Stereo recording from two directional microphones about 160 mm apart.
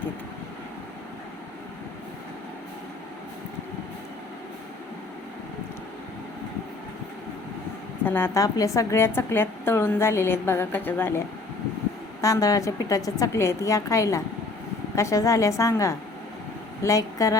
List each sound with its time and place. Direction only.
8.0 s a woman's voice: 15° left (ahead or behind)
12.2 s a woman's voice: 20° left (ahead or behind)